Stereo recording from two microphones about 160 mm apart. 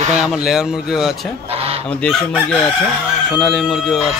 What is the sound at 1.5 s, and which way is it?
Fowl, 40° right (ahead or behind).